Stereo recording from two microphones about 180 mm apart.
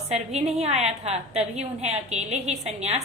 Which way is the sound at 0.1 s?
35° right (ahead or behind).